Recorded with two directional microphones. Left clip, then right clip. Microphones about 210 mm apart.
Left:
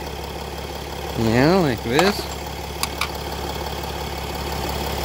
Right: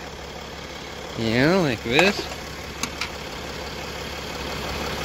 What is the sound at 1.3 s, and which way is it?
Speech, 20° left (ahead or behind).